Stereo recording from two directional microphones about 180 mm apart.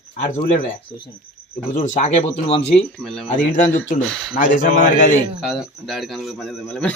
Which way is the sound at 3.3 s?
45° left (ahead or behind).